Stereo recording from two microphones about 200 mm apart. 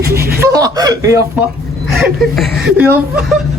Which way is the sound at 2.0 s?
Centre (ahead or behind).